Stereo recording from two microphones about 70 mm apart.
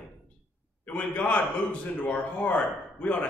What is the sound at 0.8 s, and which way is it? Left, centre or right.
A man's voice, centre.